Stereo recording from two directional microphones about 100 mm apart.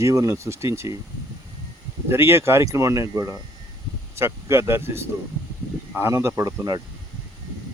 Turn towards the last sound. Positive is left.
turn(degrees=-25)  # may be behind; listen again after turning